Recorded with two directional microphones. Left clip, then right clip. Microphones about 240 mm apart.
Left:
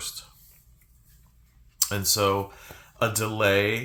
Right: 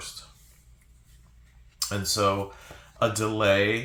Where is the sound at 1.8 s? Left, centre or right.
Left.